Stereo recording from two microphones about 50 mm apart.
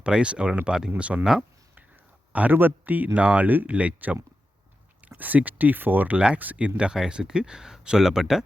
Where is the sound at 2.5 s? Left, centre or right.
Right.